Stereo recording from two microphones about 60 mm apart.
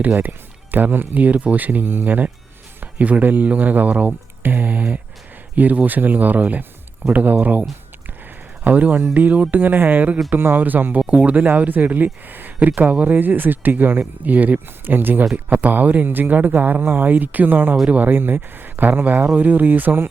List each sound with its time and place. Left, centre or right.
0.2 s speech: right
11.0 s speech: right